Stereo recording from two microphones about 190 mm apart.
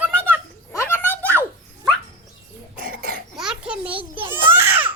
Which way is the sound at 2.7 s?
50° right (ahead or behind).